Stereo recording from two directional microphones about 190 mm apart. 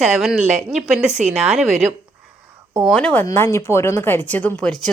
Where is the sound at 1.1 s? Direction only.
35° right (ahead or behind).